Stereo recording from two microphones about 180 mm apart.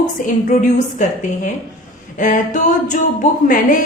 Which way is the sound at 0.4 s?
45° left (ahead or behind).